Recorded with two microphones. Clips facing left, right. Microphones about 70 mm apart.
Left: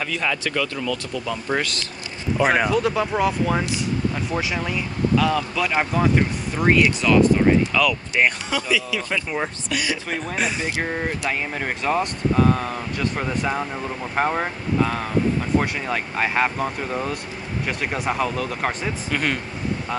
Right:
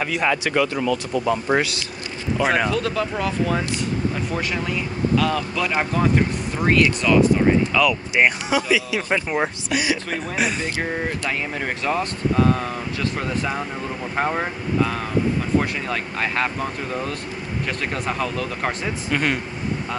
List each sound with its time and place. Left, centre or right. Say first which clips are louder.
0.0 s speech: right 3 dB; right
1.5 s speech: right 1 dB; centre
2.3 s speech: left 1 dB; centre
8.5 s speech: right 3 dB; centre
10.1 s speech: right 1 dB; centre